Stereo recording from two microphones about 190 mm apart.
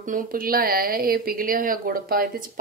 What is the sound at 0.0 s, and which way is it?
A woman's voice, 45° right (ahead or behind).